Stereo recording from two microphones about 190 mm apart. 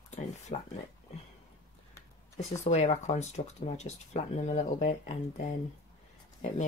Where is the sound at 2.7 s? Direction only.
35° left (ahead or behind).